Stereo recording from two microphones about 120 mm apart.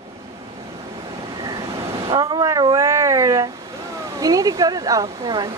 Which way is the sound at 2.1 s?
35° right (ahead or behind).